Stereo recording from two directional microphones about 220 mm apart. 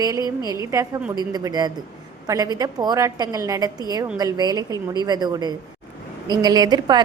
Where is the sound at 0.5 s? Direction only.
15° right (ahead or behind).